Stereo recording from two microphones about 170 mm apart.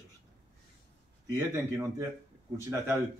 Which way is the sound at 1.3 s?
15° right (ahead or behind).